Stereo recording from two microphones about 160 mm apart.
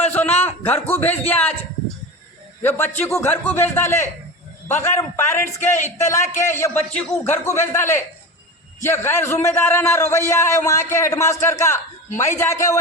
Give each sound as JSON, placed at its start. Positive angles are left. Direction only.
{"t": 0.0, "sound": "a sound", "side_deg": 10}
{"t": 1.3, "sound": "a man's voice", "side_deg": 10}
{"t": 2.6, "sound": "a man's voice", "side_deg": 15}